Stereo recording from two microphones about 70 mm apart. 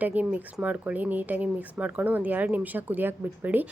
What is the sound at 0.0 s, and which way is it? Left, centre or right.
A woman's voice, right.